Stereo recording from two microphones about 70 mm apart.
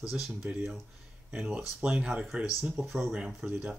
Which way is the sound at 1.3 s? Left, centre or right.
Centre.